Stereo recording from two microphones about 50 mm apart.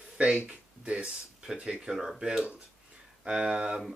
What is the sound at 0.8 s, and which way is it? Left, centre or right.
Speech, right.